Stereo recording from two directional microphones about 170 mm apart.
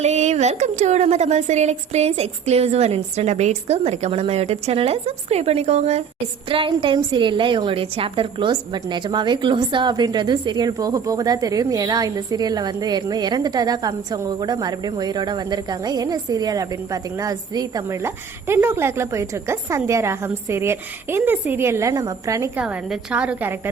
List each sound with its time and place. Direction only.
0.0 s a woman's voice: 40° right (ahead or behind); by 22.6 s 15° right (ahead or behind)
22.6 s a woman's voice: 5° right (ahead or behind)